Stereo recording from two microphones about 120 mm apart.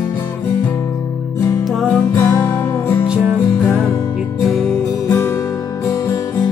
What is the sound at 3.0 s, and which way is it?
Music, 10° right (ahead or behind).